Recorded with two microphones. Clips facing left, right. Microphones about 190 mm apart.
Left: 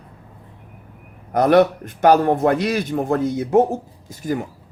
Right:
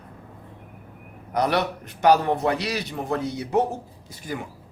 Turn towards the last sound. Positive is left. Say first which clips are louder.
# left 8 dB
turn(degrees=45)  # may be behind; listen again after turning